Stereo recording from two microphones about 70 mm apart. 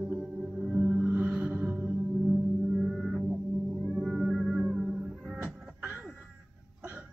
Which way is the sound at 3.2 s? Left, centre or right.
Centre.